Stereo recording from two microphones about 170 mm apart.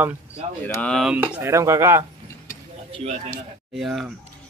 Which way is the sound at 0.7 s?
5° left (ahead or behind).